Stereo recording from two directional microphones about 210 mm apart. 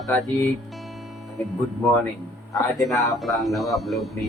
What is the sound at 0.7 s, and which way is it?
Music, centre (ahead or behind).